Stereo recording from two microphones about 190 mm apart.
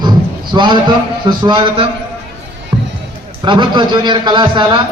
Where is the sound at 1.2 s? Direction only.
25° right (ahead or behind).